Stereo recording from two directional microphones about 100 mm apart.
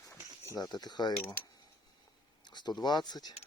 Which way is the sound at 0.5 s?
40° left (ahead or behind).